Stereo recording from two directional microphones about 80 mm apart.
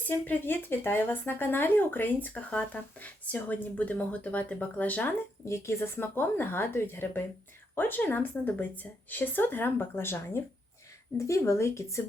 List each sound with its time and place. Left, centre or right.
0.1 s speech: left
5.5 s speech: left